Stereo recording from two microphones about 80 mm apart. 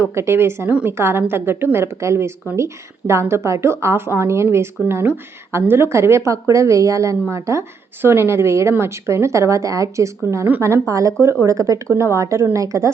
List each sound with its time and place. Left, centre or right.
0.1 s a woman's voice: right